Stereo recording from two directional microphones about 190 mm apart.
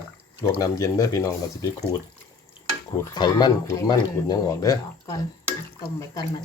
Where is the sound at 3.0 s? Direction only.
20° left (ahead or behind).